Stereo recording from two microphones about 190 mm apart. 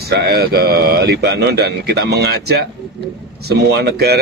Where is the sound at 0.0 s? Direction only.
60° right (ahead or behind).